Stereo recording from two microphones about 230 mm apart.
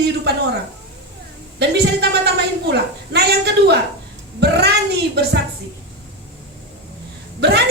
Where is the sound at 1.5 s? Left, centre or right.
Right.